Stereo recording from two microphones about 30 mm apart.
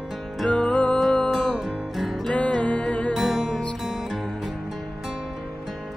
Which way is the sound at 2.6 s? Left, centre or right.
Left.